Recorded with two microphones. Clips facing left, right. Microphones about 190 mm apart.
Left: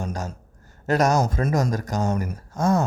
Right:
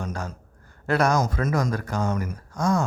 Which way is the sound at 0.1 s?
40° left (ahead or behind).